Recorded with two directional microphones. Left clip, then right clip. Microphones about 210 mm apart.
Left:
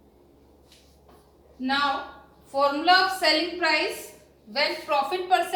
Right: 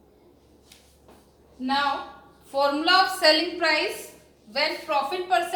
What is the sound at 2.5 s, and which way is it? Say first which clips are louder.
A woman's voice: even; 45° right (ahead or behind).